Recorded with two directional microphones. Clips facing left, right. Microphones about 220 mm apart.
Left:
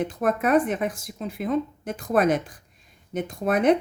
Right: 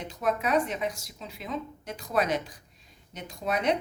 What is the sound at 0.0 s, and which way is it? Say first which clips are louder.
A woman's voice: left 6 dB; 50° left (ahead or behind).